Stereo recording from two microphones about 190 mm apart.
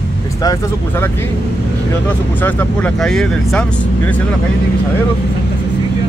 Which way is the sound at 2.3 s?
10° left (ahead or behind).